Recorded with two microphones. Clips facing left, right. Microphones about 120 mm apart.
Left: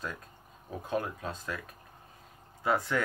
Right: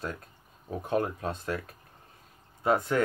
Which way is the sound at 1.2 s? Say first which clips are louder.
Right 5 dB; 30° right (ahead or behind).